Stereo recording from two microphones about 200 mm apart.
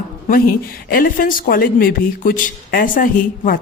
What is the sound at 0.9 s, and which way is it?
Speech, 45° left (ahead or behind).